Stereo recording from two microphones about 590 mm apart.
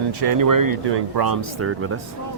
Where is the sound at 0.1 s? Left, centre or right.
Right.